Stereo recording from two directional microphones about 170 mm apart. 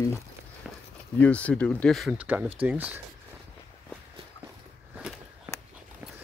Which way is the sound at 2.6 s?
10° right (ahead or behind).